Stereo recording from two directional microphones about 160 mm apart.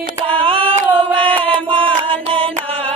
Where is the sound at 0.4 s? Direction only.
35° right (ahead or behind).